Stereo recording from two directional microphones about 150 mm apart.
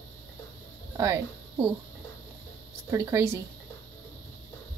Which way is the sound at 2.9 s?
20° right (ahead or behind).